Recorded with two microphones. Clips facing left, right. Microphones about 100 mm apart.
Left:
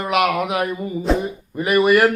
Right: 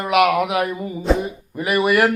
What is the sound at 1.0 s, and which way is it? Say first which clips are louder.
Speech: right 1 dB; centre (ahead or behind).